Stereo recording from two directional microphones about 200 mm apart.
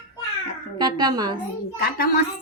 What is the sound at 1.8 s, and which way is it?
Speech, 50° left (ahead or behind).